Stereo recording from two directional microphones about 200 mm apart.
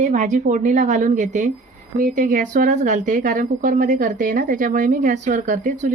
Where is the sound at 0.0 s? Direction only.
35° right (ahead or behind).